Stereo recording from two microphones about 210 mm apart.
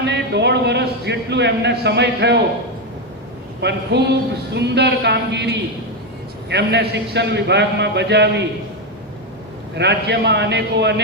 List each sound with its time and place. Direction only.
0.1 s a man's voice: 55° right (ahead or behind)
3.6 s a man's voice: 55° right (ahead or behind)
9.7 s a man's voice: 55° right (ahead or behind)